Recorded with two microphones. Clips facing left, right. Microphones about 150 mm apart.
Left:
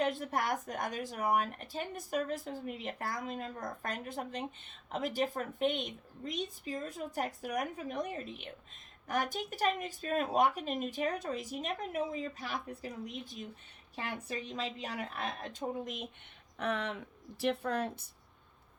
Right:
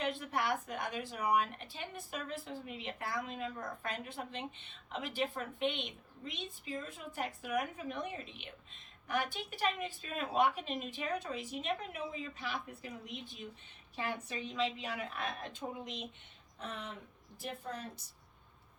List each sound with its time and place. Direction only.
0.0 s a woman's voice: 40° left (ahead or behind)
16.6 s speech: 70° left (ahead or behind)